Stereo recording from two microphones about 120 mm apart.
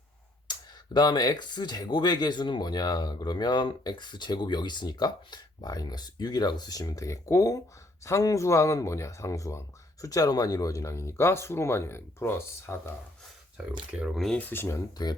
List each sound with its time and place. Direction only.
0.9 s speech: 35° left (ahead or behind)
14.0 s speech: centre (ahead or behind)
14.3 s speech: 15° left (ahead or behind)
15.0 s speech: 35° left (ahead or behind)